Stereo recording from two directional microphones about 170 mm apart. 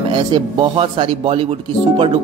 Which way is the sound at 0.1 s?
30° right (ahead or behind).